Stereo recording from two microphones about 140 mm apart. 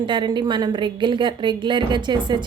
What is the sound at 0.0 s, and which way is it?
A woman's voice, 35° right (ahead or behind).